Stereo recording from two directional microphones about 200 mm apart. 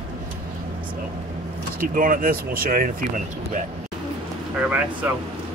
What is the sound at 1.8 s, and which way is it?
Speech, 45° right (ahead or behind).